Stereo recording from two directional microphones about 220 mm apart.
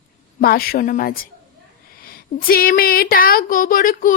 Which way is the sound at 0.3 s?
45° left (ahead or behind).